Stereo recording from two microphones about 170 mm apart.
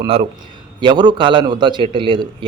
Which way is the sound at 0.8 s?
25° right (ahead or behind).